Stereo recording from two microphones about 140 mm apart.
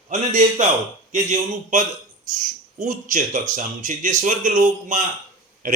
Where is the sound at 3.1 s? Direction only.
65° right (ahead or behind).